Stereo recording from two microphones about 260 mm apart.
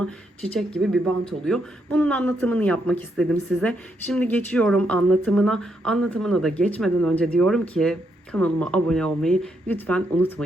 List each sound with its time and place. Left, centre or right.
0.7 s speech: centre